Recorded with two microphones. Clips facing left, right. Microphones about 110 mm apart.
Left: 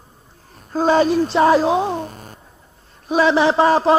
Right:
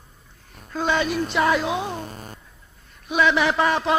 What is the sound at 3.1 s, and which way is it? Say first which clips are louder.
Speech: left 5 dB; 35° left (ahead or behind).